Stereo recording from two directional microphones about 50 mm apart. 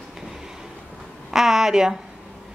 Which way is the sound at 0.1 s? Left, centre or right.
Centre.